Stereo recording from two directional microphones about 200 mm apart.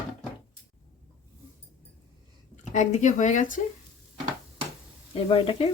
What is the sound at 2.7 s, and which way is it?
Speech, 35° left (ahead or behind).